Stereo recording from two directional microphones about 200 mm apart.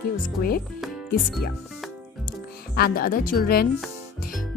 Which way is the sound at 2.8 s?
50° left (ahead or behind).